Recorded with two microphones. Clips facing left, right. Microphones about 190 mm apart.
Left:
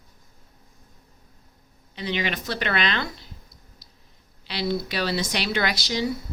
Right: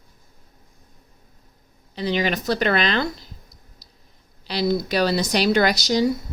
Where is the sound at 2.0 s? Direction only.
40° right (ahead or behind).